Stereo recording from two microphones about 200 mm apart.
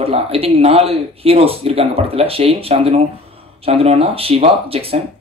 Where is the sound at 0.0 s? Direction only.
30° right (ahead or behind).